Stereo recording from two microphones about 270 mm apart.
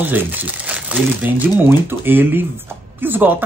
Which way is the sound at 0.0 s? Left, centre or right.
Centre.